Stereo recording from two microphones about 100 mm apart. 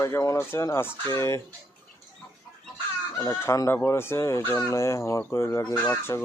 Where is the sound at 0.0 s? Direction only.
30° left (ahead or behind).